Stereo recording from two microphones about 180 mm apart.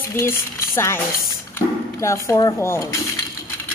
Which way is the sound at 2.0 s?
15° left (ahead or behind).